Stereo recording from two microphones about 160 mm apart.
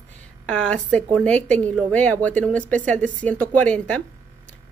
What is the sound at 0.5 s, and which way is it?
Speech, 10° left (ahead or behind).